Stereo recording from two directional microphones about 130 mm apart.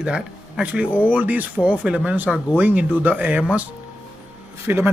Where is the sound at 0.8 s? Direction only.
10° left (ahead or behind).